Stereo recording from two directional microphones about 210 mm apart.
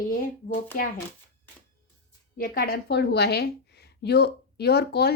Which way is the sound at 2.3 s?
45° left (ahead or behind).